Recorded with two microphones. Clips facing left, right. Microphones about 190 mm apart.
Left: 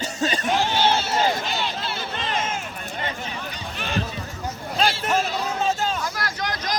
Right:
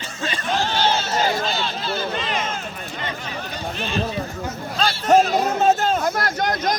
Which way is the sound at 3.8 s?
20° right (ahead or behind).